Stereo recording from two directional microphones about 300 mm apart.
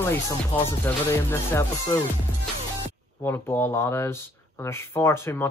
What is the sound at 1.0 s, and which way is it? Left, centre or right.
Speech, centre.